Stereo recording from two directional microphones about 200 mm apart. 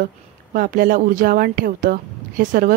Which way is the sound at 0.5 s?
45° right (ahead or behind).